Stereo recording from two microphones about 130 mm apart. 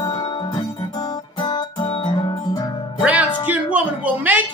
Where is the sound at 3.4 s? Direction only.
10° right (ahead or behind).